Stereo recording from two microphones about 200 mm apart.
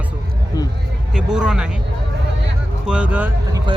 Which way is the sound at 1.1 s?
5° right (ahead or behind).